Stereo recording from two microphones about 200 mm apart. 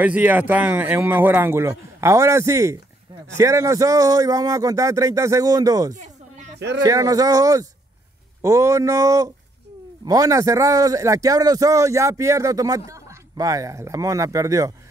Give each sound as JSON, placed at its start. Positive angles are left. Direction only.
{"t": 0.0, "sound": "a man's voice", "side_deg": -10}
{"t": 5.9, "sound": "a sound", "side_deg": -35}
{"t": 6.8, "sound": "a man's voice", "side_deg": -15}